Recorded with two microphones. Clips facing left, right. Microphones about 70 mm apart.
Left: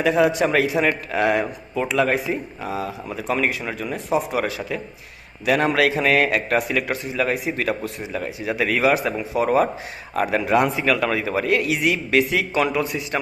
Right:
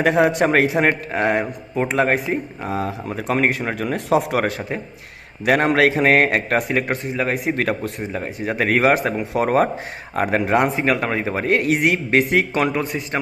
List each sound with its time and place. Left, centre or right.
0.0 s a man's voice: right
4.4 s a man's voice: right
7.3 s a man's voice: right